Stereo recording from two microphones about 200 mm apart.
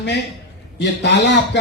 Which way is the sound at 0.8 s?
60° left (ahead or behind).